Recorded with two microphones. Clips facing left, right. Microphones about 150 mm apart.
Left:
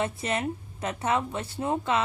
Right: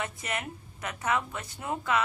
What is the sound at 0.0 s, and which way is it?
Speech, 30° left (ahead or behind).